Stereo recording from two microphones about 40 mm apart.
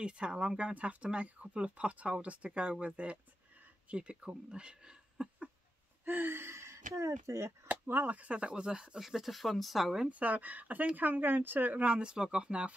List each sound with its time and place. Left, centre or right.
0.0 s speech: right
6.0 s gasp: right
7.6 s chop: right
8.1 s speech: right
9.0 s speech: centre
10.0 s speech: right
11.8 s speech: right